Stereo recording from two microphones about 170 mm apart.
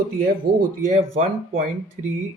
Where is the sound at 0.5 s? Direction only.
50° right (ahead or behind).